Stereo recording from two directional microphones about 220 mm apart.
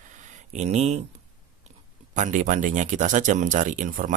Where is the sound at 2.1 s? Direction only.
35° right (ahead or behind).